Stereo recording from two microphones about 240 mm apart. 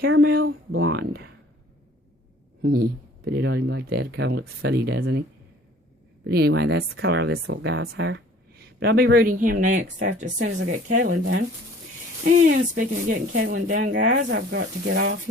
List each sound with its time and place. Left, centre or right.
0.0 s speech: right
0.7 s a sound: right
2.6 s speech: right
6.2 s speech: right